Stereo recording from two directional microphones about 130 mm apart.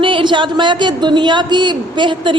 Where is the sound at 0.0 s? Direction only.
40° right (ahead or behind).